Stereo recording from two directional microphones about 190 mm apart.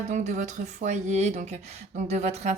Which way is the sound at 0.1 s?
40° right (ahead or behind).